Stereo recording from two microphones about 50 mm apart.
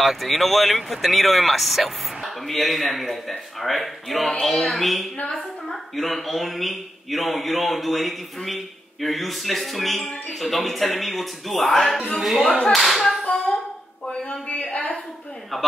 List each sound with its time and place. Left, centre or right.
0.0 s speech: centre
5.1 s a woman's voice: left
5.7 s speech: centre
12.7 s clapping: centre
13.2 s hands: left
14.3 s a sound: left